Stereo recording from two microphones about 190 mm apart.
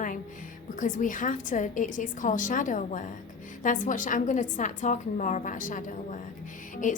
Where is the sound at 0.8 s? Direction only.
40° left (ahead or behind).